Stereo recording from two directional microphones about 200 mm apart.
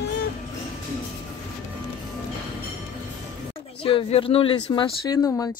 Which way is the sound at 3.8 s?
25° left (ahead or behind).